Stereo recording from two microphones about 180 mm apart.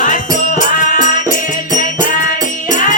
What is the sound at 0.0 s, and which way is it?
Music, 45° left (ahead or behind).